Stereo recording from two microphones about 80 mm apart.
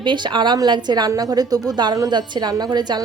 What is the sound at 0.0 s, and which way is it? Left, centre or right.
A woman's voice, right.